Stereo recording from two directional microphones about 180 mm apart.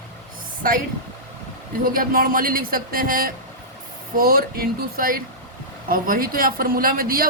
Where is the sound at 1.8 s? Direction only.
50° right (ahead or behind).